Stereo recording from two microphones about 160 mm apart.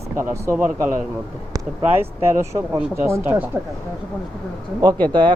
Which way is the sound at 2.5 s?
25° right (ahead or behind).